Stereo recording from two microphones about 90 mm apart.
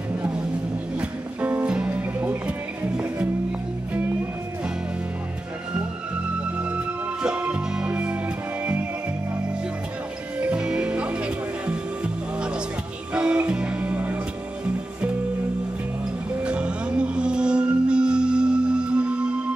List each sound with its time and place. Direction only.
0.9 s music: 15° right (ahead or behind)
6.4 s music: 10° right (ahead or behind)
10.4 s music: 10° right (ahead or behind)
16.4 s music: 10° right (ahead or behind)